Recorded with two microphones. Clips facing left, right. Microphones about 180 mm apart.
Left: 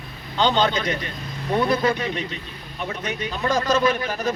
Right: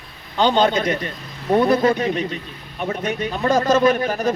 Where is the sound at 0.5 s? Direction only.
40° right (ahead or behind).